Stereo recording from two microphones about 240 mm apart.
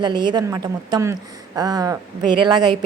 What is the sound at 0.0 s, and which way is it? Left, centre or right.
A woman's voice, centre.